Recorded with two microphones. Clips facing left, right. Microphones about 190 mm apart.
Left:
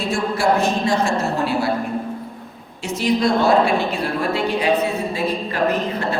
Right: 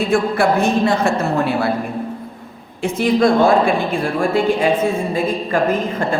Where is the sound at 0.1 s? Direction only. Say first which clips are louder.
Right 1 dB; 60° right (ahead or behind).